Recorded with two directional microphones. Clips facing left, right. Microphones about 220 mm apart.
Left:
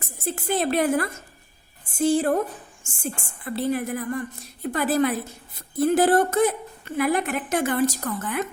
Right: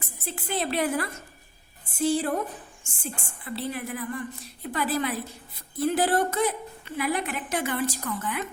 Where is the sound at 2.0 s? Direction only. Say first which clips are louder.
Left 4 dB; 50° left (ahead or behind).